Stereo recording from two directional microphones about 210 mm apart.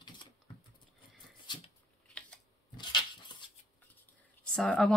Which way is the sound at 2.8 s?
20° left (ahead or behind).